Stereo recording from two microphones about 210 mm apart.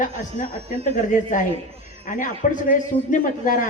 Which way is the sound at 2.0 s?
40° left (ahead or behind).